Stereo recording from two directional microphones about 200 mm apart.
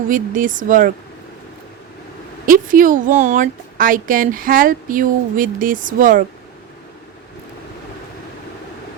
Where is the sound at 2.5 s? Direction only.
45° right (ahead or behind).